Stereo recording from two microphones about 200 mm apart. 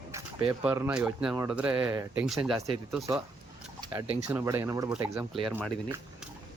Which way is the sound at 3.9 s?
15° right (ahead or behind).